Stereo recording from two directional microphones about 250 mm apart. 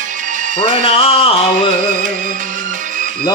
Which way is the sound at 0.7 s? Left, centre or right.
Left.